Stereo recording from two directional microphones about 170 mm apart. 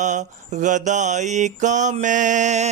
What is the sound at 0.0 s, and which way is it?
Mantra, 45° right (ahead or behind).